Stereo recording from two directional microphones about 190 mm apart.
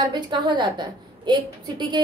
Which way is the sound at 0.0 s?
25° right (ahead or behind).